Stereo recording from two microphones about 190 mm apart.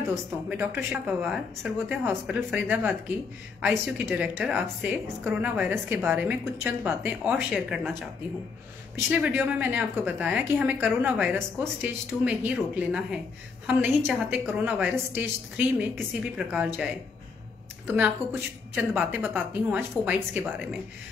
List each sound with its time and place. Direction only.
0.1 s a woman's voice: 10° right (ahead or behind)
8.9 s a woman's voice: 10° right (ahead or behind)
17.8 s a woman's voice: 10° right (ahead or behind)